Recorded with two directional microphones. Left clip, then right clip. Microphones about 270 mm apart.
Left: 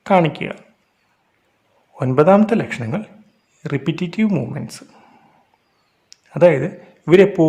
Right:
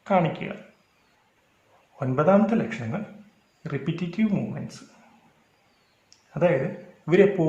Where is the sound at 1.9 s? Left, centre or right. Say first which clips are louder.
Left 8 dB; left.